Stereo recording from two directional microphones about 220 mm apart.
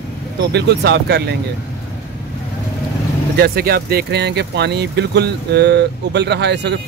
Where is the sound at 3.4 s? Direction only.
45° right (ahead or behind).